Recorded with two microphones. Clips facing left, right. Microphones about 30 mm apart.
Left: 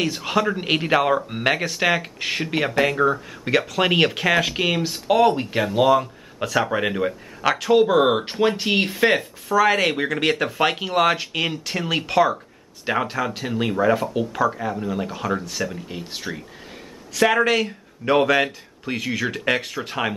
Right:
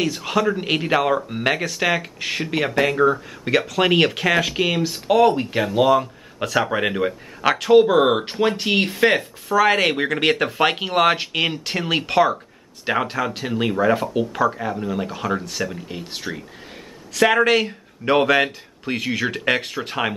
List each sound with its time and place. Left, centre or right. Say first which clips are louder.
0.0 s speech: right 1 dB; centre